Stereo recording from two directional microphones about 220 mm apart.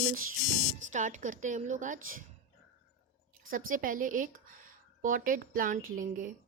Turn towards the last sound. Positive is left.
turn(degrees=-35)  # may be behind; listen again after turning